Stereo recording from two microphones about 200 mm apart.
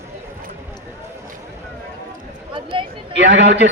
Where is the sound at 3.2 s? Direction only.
60° right (ahead or behind).